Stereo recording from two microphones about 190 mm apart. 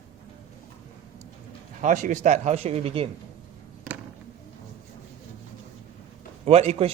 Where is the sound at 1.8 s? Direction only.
40° right (ahead or behind).